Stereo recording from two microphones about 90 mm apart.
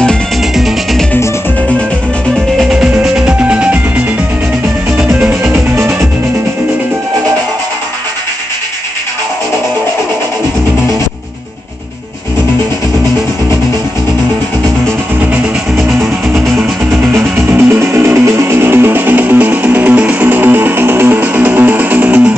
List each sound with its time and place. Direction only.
0.6 s music: centre (ahead or behind)
2.6 s music: 5° right (ahead or behind)
5.8 s music: 30° right (ahead or behind)
15.8 s music: centre (ahead or behind)
17.5 s music: 25° right (ahead or behind)